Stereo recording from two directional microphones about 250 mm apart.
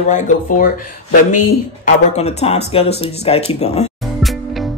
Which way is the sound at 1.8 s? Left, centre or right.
Left.